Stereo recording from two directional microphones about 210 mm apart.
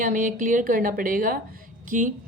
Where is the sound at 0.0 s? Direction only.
40° right (ahead or behind).